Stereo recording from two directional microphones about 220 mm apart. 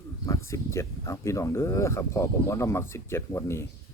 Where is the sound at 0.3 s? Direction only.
15° left (ahead or behind).